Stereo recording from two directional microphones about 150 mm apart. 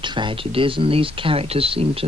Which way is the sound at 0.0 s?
30° right (ahead or behind).